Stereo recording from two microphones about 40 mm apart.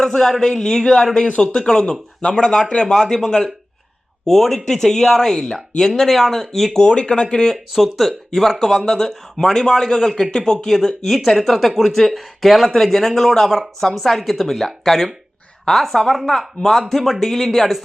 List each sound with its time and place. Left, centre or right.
0.0 s speech: centre
2.8 s speech: centre
4.3 s speech: centre
4.6 s speech: centre
6.8 s speech: left
7.7 s speech: centre
10.8 s speech: centre